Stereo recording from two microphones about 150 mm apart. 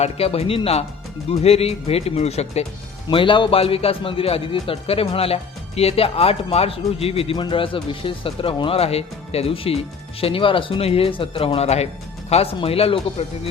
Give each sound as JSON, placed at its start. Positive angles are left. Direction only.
{"t": 0.0, "sound": "speech", "side_deg": 40}
{"t": 3.1, "sound": "speech", "side_deg": 35}